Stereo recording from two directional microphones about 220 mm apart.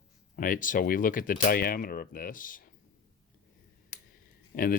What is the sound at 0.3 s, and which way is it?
Speech, 40° left (ahead or behind).